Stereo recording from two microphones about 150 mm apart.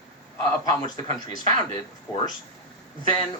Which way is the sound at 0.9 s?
30° left (ahead or behind).